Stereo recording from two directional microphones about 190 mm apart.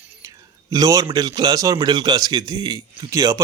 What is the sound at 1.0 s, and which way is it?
Speech, 25° right (ahead or behind).